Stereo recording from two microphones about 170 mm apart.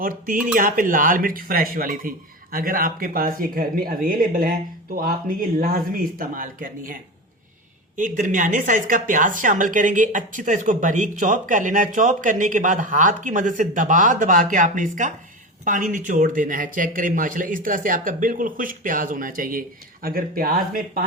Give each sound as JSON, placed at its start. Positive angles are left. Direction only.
{"t": 0.4, "sound": "speech", "side_deg": -50}
{"t": 7.9, "sound": "speech", "side_deg": -50}